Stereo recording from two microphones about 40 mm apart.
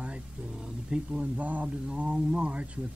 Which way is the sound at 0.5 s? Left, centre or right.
Right.